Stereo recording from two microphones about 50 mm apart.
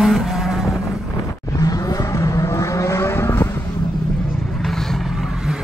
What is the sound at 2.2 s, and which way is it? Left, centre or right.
Vehicle, left.